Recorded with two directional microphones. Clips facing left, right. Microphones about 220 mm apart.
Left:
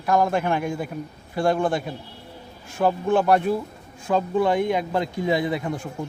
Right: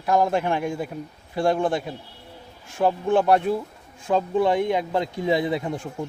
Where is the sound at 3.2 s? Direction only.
25° right (ahead or behind).